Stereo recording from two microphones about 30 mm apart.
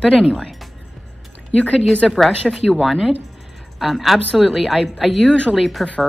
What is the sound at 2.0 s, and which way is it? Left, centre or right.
Speech, centre.